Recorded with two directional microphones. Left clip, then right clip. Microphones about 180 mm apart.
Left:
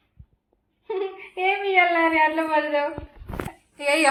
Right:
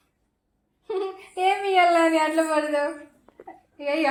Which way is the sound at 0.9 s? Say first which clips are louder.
Even; 15° right (ahead or behind).